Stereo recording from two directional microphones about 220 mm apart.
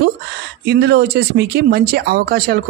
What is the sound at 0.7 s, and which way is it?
Speech, 50° right (ahead or behind).